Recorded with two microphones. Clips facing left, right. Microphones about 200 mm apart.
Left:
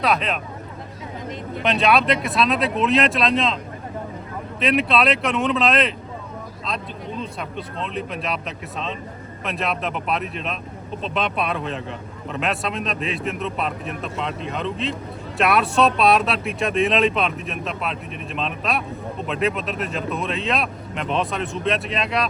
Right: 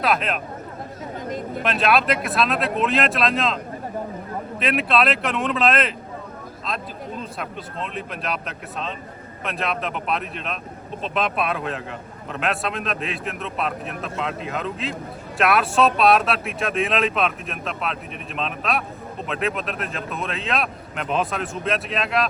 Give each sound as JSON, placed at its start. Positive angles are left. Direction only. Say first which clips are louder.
{"t": 0.0, "sound": "a man's voice", "louder": "left 1 dB", "side_deg": 0}
{"t": 1.3, "sound": "speech", "louder": "right 3 dB", "side_deg": -45}
{"t": 1.6, "sound": "a man's voice", "louder": "left 2 dB", "side_deg": 0}
{"t": 4.6, "sound": "a man's voice", "louder": "left 2 dB", "side_deg": 0}